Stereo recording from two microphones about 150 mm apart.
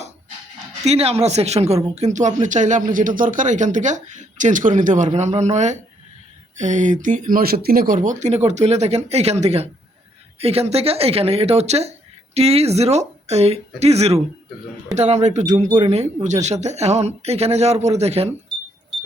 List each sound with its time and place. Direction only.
0.9 s speech: 45° right (ahead or behind)